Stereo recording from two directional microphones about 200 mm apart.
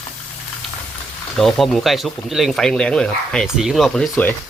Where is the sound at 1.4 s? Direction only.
Centre (ahead or behind).